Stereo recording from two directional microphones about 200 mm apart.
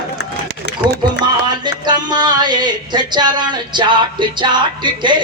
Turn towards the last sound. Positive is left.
turn(degrees=-25)  # may be behind; listen again after turning